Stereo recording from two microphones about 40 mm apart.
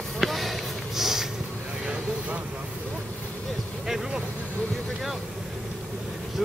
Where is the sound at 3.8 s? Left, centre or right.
Centre.